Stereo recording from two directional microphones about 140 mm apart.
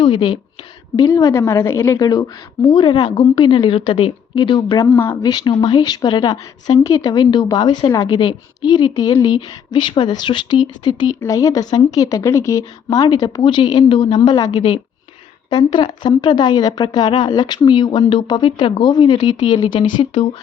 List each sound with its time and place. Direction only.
0.0 s speech: 35° left (ahead or behind)
4.8 s speech: 15° left (ahead or behind)
5.2 s speech: 30° left (ahead or behind)